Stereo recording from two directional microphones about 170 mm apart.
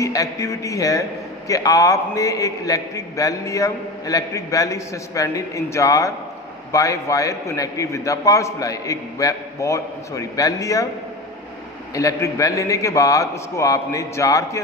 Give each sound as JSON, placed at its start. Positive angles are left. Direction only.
{"t": 0.0, "sound": "a man's voice", "side_deg": 20}
{"t": 11.9, "sound": "a man's voice", "side_deg": 20}